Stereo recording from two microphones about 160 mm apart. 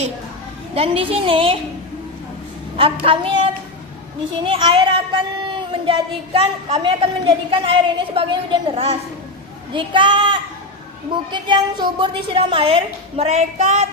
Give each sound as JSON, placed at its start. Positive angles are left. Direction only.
{"t": 0.7, "sound": "a woman's voice", "side_deg": -35}
{"t": 2.7, "sound": "a woman's voice", "side_deg": -35}